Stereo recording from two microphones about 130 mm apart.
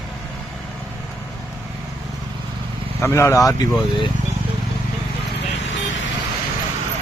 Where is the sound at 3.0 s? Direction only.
20° left (ahead or behind).